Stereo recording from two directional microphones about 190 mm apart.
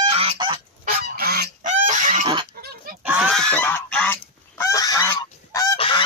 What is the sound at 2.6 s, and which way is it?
Goose, 50° right (ahead or behind).